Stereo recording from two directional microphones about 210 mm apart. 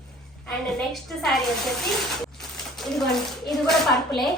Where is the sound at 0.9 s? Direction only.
Centre (ahead or behind).